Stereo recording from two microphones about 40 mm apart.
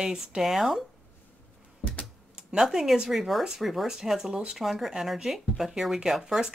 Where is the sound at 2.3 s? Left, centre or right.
Right.